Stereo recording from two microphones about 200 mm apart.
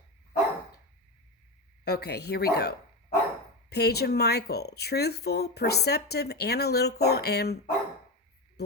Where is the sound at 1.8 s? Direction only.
55° left (ahead or behind).